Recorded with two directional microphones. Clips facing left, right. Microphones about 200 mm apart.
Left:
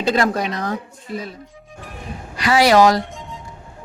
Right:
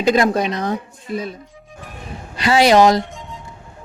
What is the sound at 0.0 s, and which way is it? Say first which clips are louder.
A woman's voice: right 3 dB; 15° right (ahead or behind).